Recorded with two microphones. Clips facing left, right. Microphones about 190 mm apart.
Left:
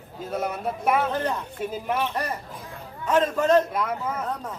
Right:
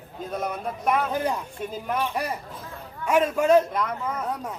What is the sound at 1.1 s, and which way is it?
Speech, 10° right (ahead or behind).